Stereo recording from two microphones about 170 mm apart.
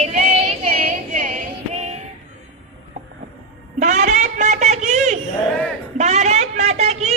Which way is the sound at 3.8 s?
45° right (ahead or behind).